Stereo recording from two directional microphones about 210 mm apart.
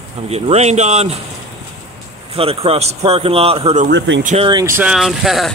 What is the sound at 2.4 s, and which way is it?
Speech, 30° right (ahead or behind).